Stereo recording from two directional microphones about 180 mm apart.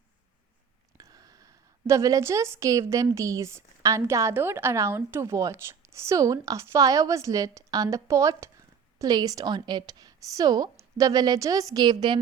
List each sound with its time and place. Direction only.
0.9 s a woman's voice: 20° right (ahead or behind)